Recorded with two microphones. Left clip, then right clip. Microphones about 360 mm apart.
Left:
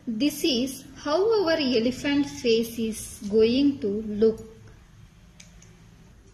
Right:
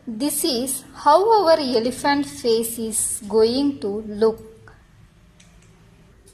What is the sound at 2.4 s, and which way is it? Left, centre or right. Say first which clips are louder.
A woman's voice: right 3 dB; right.